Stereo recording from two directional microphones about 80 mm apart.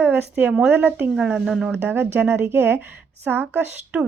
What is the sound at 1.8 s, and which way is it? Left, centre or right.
A woman's voice, right.